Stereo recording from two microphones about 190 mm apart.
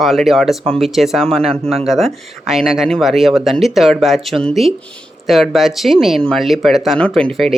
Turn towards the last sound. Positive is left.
turn(degrees=5)  # may be behind; listen again after turning